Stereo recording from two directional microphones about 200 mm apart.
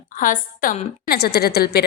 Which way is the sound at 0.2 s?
45° left (ahead or behind).